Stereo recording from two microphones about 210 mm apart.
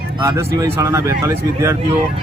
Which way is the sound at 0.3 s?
15° right (ahead or behind).